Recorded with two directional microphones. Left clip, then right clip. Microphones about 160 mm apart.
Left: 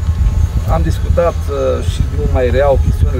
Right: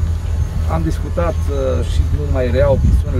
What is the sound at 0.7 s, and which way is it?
Speech, 15° left (ahead or behind).